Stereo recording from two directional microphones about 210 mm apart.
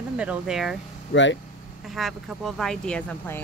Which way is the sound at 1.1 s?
60° left (ahead or behind).